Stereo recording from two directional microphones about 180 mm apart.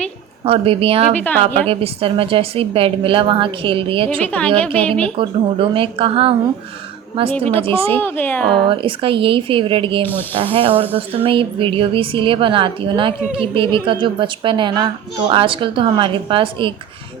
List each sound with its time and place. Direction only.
0.4 s a woman's voice: 30° right (ahead or behind)
4.2 s speech: 10° left (ahead or behind)
5.1 s a woman's voice: 30° right (ahead or behind)
7.3 s speech: 10° left (ahead or behind)
7.6 s a woman's voice: 30° right (ahead or behind)
7.9 s speech: 10° left (ahead or behind)
8.7 s a woman's voice: 30° right (ahead or behind)